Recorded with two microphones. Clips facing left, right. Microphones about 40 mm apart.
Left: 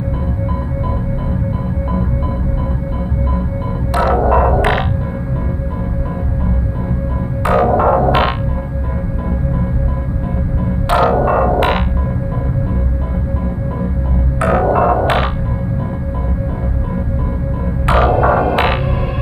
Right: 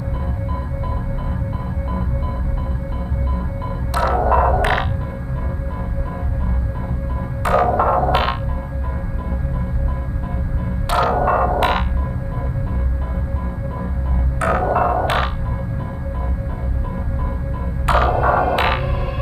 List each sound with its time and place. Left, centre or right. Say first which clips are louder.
3.9 s music: left 3 dB; left
7.4 s music: left 3 dB; centre
10.9 s music: left 4 dB; left
14.4 s music: left 4 dB; centre
17.8 s music: left 4 dB; left